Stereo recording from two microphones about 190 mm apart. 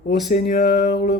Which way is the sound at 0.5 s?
60° left (ahead or behind).